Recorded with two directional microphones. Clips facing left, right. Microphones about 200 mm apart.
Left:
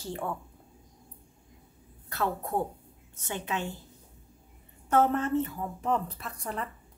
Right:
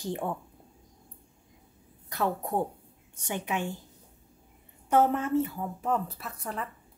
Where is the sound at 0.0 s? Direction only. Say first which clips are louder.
Right 2 dB; 15° right (ahead or behind).